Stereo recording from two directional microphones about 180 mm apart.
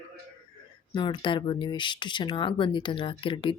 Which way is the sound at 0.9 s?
25° left (ahead or behind).